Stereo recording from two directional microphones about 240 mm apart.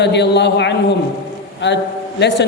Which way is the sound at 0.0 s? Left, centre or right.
Left.